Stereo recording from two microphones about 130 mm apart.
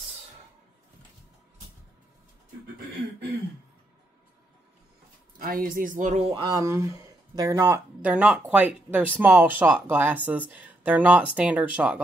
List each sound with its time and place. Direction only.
5.4 s speech: 90° right
6.1 s speech: 50° right (ahead or behind)
6.4 s speech: 25° right (ahead or behind); by 12.0 s 10° right (ahead or behind)